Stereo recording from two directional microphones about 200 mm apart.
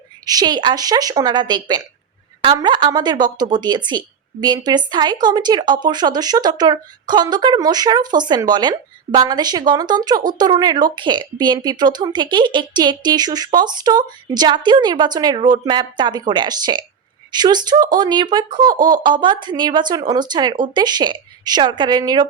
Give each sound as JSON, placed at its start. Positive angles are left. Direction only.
{"t": 0.3, "sound": "speech", "side_deg": -20}